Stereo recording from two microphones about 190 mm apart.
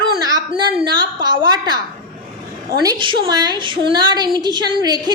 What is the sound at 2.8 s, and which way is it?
A woman's voice, 25° right (ahead or behind).